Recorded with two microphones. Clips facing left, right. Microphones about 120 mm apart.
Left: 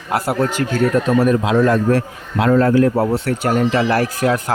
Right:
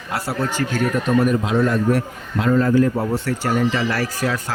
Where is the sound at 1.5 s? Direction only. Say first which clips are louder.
Left 4 dB; 90° left.